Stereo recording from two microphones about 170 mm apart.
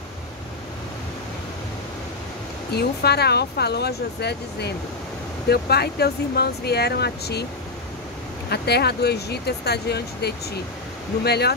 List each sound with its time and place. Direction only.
2.7 s speech: 70° left (ahead or behind)
8.5 s speech: 70° left (ahead or behind)